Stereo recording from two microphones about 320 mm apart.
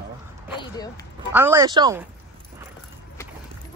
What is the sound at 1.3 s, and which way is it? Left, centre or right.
Speech, centre.